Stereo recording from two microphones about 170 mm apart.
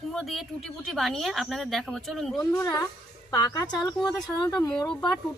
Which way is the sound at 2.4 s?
15° left (ahead or behind).